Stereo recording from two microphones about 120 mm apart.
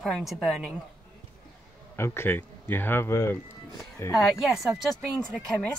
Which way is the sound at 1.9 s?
20° left (ahead or behind).